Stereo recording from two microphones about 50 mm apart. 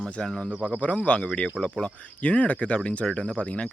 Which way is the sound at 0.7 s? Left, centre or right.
Left.